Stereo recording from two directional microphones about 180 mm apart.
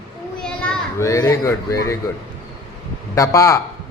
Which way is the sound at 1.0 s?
15° left (ahead or behind).